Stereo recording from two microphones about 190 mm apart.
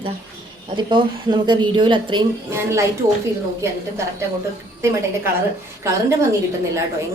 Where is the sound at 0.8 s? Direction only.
25° right (ahead or behind).